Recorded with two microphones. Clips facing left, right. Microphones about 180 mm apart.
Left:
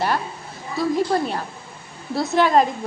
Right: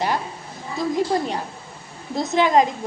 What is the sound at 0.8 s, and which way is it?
A woman's voice, 15° right (ahead or behind).